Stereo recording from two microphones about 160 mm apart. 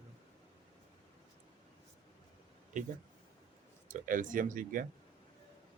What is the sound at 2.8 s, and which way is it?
Speech, 50° right (ahead or behind).